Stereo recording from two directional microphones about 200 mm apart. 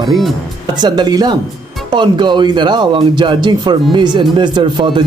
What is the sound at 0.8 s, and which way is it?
Speech, 20° right (ahead or behind).